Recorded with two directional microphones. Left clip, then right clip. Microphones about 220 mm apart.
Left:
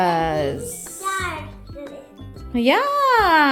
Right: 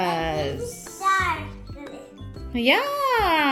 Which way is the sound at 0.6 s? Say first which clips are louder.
Right 2 dB; 40° left (ahead or behind).